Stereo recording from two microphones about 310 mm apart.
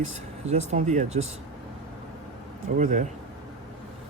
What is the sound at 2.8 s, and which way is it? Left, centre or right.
Speech, right.